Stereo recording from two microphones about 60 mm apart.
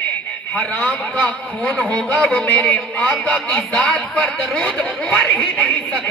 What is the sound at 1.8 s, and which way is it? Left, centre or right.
Speech, left.